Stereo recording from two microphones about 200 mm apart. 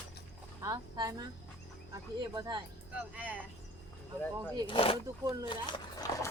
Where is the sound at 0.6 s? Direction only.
20° right (ahead or behind).